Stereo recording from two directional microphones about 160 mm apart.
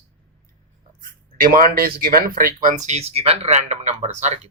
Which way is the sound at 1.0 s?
60° right (ahead or behind).